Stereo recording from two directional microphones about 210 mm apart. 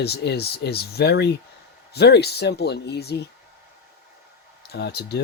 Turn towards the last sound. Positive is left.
turn(degrees=50)  # may be behind; listen again after turning